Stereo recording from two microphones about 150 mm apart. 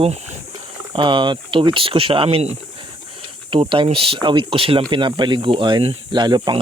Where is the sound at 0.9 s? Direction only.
30° right (ahead or behind).